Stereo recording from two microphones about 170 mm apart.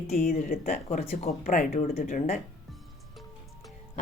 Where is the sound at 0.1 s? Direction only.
55° left (ahead or behind).